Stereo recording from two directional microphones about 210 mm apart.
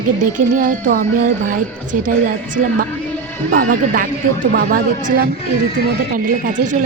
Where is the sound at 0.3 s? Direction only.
40° right (ahead or behind).